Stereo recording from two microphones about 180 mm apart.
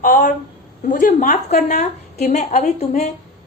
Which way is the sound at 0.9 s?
45° left (ahead or behind).